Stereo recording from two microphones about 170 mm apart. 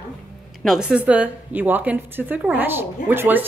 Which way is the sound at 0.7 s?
5° right (ahead or behind).